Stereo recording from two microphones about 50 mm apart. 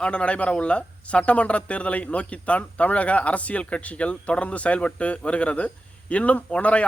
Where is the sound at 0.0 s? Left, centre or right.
Left.